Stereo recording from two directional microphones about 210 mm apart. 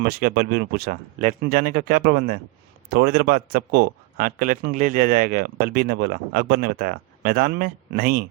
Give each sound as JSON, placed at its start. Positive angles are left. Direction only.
{"t": 0.0, "sound": "speech", "side_deg": -45}